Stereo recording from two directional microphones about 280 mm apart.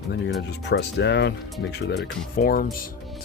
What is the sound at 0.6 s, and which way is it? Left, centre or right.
Speech, left.